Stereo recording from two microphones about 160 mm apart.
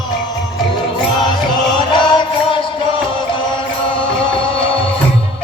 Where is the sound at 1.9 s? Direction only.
30° left (ahead or behind).